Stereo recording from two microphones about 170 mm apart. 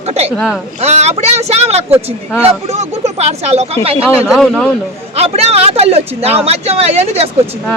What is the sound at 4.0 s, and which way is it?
Speech, 10° right (ahead or behind).